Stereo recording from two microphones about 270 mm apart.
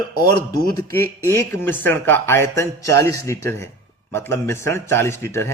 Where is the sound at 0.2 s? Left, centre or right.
Centre.